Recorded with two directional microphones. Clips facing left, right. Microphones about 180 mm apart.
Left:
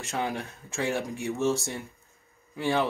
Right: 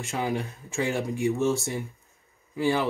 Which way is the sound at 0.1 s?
5° right (ahead or behind).